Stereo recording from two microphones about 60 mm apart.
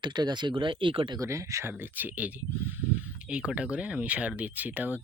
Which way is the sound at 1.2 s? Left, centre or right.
Right.